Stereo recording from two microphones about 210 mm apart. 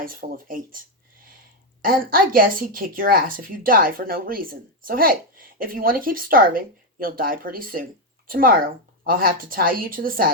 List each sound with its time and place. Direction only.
0.0 s a woman's voice: 40° right (ahead or behind)
1.8 s a woman's voice: 45° right (ahead or behind)